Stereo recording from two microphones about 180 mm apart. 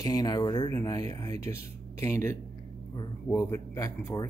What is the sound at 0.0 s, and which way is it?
Speech, 20° left (ahead or behind).